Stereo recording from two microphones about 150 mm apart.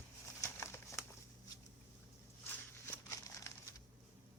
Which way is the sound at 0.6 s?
20° left (ahead or behind).